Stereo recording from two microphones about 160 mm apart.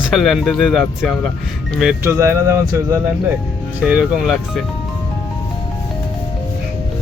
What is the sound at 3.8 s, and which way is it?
Speech, 5° right (ahead or behind).